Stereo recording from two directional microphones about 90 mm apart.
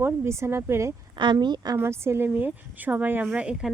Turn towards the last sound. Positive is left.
turn(degrees=-10)  # may be behind; listen again after turning